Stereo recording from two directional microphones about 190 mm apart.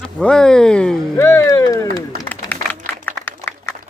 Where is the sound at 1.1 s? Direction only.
15° left (ahead or behind).